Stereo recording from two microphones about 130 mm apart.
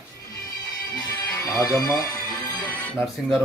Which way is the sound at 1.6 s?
25° left (ahead or behind).